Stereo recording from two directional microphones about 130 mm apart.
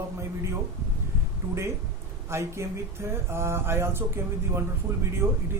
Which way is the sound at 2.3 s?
20° right (ahead or behind).